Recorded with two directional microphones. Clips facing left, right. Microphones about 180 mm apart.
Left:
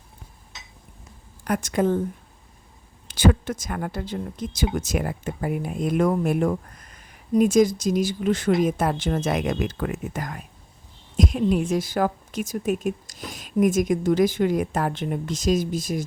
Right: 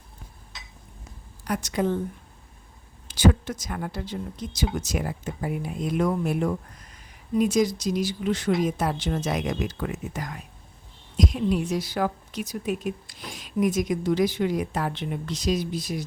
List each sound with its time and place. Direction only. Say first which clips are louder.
1.5 s speech: left 3 dB; 50° left (ahead or behind)
3.1 s speech: left 1 dB; 50° left (ahead or behind)